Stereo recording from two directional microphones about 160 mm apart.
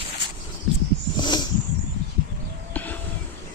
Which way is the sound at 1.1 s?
25° left (ahead or behind).